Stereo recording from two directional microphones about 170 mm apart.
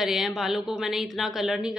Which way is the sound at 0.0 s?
Centre (ahead or behind).